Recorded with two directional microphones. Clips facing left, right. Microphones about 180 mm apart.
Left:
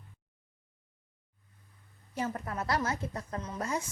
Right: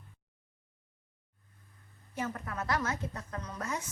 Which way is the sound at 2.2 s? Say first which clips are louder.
Left 2 dB; 35° left (ahead or behind).